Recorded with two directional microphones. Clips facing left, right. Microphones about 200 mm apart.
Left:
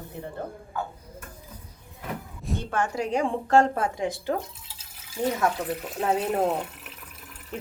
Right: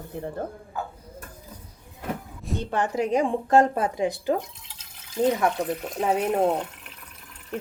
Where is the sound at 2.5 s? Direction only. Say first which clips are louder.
Right 2 dB; 20° right (ahead or behind).